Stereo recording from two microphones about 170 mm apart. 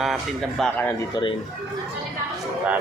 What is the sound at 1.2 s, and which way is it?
Speech, 25° left (ahead or behind).